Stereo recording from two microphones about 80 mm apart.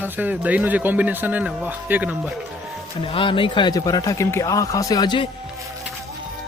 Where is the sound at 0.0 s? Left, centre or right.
Right.